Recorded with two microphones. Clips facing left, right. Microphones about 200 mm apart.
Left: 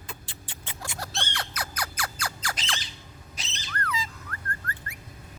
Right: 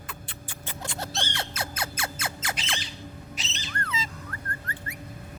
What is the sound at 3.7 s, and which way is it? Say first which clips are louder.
Music: left 2 dB; 25° right (ahead or behind).